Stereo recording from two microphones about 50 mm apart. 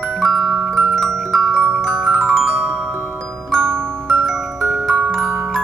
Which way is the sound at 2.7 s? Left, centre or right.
Right.